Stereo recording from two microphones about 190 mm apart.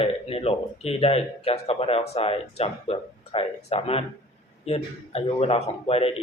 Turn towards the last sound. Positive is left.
turn(degrees=30)  # may be behind; listen again after turning